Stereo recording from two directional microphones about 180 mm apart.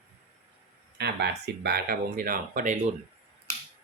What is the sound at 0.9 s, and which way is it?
Speech, 70° right (ahead or behind).